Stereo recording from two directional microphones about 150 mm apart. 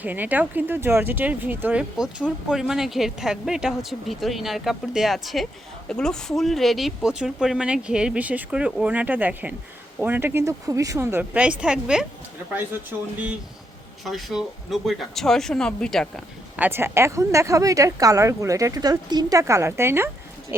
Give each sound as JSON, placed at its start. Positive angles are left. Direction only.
{"t": 0.0, "sound": "speech", "side_deg": -10}
{"t": 16.6, "sound": "speech", "side_deg": -15}